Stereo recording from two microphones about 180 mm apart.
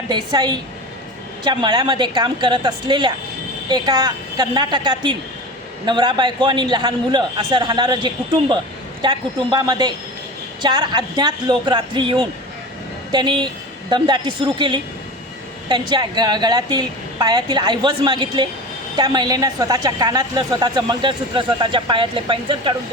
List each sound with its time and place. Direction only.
0.1 s a woman's voice: 25° right (ahead or behind)